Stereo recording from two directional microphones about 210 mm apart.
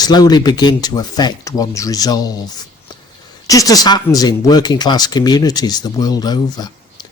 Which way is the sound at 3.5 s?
15° left (ahead or behind).